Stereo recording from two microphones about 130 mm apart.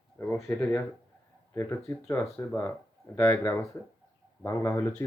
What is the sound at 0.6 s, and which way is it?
Speech, 15° left (ahead or behind).